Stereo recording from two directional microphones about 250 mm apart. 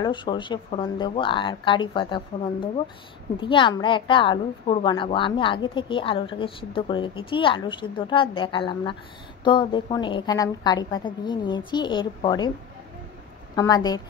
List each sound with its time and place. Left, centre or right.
0.0 s a woman's voice: centre
13.6 s a woman's voice: centre